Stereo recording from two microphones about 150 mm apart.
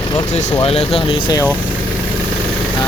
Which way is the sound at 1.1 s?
30° left (ahead or behind).